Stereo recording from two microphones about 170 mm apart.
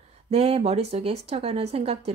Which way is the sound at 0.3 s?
35° right (ahead or behind).